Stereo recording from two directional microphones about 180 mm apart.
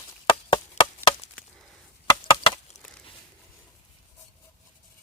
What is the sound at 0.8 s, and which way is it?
Chop, 40° left (ahead or behind).